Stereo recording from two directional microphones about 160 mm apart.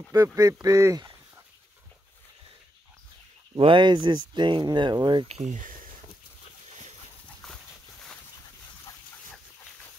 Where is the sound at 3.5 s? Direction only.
30° right (ahead or behind).